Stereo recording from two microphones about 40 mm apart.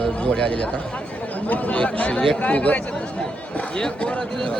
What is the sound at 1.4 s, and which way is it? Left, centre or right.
Speech, left.